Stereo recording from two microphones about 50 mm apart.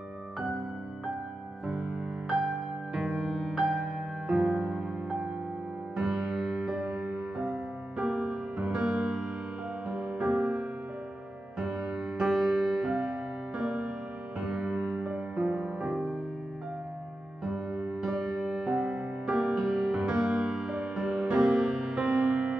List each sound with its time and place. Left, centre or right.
2.9 s music: centre
6.0 s music: centre
18.0 s music: centre